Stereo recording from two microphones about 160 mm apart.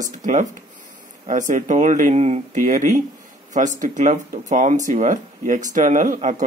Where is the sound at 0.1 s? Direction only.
50° right (ahead or behind).